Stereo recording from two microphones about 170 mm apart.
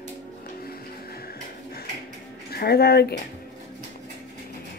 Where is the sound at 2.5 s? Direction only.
65° left (ahead or behind).